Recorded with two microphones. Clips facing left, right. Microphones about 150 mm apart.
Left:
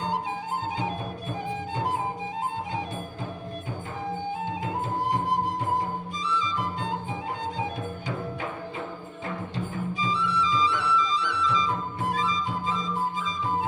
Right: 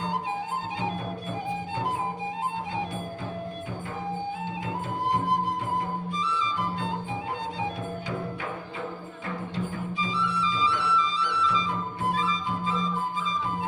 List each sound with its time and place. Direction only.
10.0 s music: 40° left (ahead or behind)